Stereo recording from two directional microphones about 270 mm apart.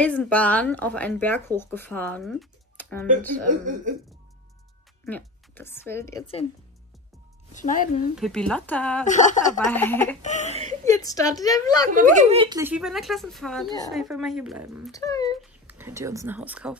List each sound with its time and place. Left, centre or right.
0.0 s speech: centre
3.4 s speech: right
5.0 s speech: centre
7.5 s speech: left
8.2 s speech: centre
9.0 s speech: left
9.7 s a woman's voice: centre
10.2 s speech: left
10.5 s speech: right
10.9 s a woman's voice: centre
11.9 s speech: right; by 15.0 s centre
15.0 s a woman's voice: centre
15.4 s speech: centre